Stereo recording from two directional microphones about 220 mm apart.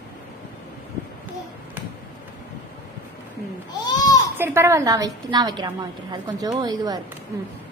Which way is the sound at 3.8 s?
20° left (ahead or behind).